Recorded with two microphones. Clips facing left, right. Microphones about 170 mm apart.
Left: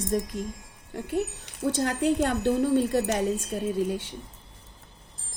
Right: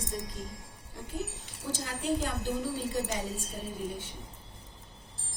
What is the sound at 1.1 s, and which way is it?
Speech, 75° left (ahead or behind).